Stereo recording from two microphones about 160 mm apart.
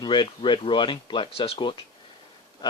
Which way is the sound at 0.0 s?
30° left (ahead or behind).